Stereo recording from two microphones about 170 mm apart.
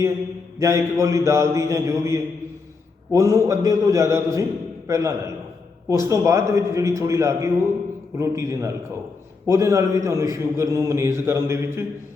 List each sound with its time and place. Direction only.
0.6 s a man's voice: 15° right (ahead or behind)